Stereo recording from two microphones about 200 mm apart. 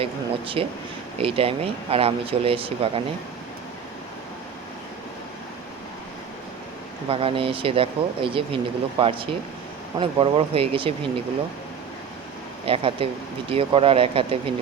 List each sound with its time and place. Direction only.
0.0 s speech: 25° right (ahead or behind)
7.1 s speech: 30° right (ahead or behind)
12.6 s speech: 25° right (ahead or behind)